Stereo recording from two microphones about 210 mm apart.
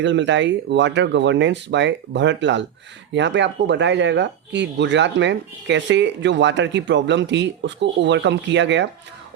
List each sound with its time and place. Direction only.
0.0 s speech: 60° right (ahead or behind)